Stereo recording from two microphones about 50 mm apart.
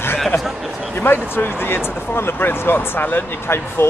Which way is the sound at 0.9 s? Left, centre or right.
Left.